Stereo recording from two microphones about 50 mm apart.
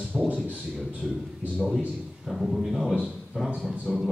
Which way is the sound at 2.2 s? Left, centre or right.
Centre.